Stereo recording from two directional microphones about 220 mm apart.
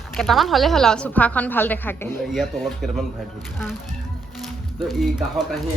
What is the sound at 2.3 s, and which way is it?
Speech, centre (ahead or behind).